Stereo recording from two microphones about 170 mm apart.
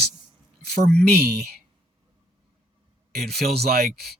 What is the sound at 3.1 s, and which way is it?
Speech, 65° right (ahead or behind).